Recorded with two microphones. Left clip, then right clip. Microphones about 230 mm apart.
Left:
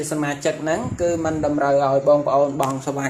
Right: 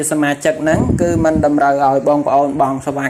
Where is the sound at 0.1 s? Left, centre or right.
Right.